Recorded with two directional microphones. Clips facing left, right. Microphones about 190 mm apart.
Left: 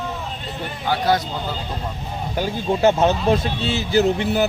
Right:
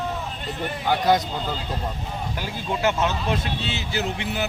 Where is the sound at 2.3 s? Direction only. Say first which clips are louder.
Left 9 dB; 30° left (ahead or behind).